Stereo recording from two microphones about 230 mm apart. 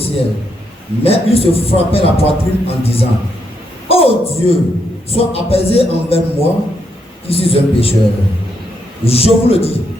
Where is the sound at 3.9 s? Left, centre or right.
Left.